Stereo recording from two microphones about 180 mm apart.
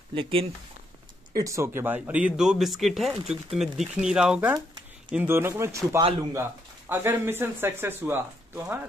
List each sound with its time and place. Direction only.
0.1 s speech: 30° right (ahead or behind)
1.3 s speech: 15° right (ahead or behind)